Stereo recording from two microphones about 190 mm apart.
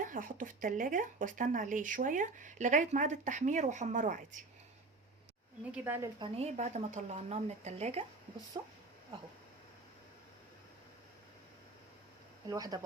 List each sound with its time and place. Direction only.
0.0 s speech: 45° right (ahead or behind)
5.7 s a woman's voice: 10° right (ahead or behind)
6.1 s speech: 30° right (ahead or behind)
12.5 s speech: 20° right (ahead or behind)